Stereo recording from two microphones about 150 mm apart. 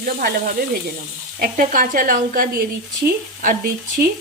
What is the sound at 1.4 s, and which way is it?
A woman's voice, 65° right (ahead or behind).